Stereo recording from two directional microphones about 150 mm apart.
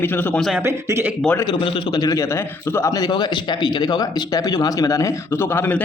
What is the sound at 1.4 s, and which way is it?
A man's voice, 25° left (ahead or behind).